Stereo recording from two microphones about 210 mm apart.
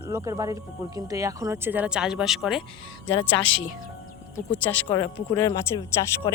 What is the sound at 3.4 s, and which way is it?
Speech, 60° left (ahead or behind).